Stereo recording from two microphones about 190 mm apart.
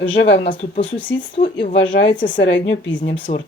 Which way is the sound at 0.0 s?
70° left (ahead or behind).